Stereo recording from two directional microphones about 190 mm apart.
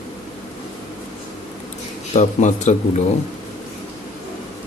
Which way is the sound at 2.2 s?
40° left (ahead or behind).